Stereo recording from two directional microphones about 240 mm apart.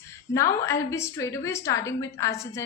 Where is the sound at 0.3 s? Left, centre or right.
Centre.